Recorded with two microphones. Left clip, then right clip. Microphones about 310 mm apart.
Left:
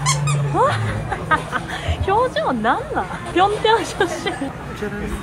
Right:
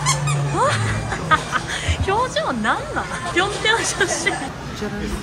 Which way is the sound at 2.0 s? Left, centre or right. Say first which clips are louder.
Left 3 dB; centre.